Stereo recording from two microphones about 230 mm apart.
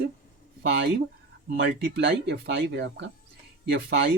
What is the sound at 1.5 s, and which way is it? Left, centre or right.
Speech, right.